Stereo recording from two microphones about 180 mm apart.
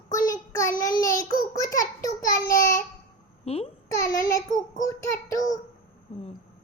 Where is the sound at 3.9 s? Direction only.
20° left (ahead or behind).